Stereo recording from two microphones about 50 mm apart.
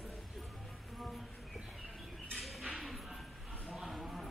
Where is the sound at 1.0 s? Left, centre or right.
Centre.